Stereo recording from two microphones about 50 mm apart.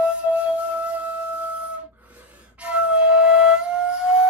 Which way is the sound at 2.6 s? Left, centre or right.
Right.